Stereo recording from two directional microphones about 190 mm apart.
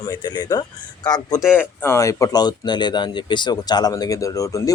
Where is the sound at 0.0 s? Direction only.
20° left (ahead or behind).